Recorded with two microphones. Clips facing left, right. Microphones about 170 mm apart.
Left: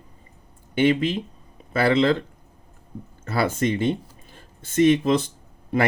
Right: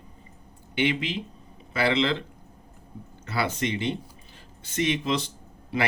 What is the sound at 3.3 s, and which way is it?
Speech, 45° left (ahead or behind).